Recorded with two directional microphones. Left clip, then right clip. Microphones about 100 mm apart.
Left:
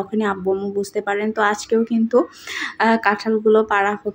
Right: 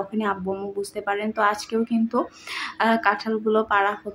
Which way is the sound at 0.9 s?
35° left (ahead or behind).